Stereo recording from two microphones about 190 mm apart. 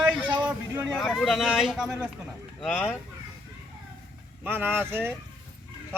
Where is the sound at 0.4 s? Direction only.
10° right (ahead or behind).